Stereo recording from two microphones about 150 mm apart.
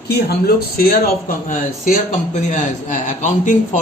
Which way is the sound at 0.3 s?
90° left.